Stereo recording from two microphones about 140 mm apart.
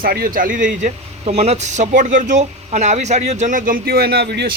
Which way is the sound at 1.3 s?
50° right (ahead or behind).